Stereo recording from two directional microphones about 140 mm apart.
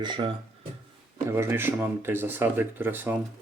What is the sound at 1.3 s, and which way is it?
Speech, 15° right (ahead or behind).